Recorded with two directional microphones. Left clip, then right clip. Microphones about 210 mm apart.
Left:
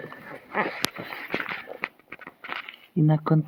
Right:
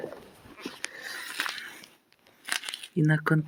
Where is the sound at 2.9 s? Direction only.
5° left (ahead or behind).